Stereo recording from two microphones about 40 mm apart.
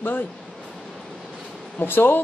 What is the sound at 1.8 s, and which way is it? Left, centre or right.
Speech, left.